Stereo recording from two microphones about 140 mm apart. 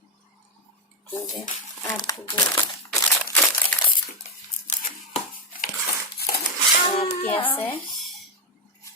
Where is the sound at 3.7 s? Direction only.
5° left (ahead or behind).